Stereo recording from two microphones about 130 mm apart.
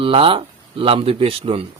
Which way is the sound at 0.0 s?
45° right (ahead or behind).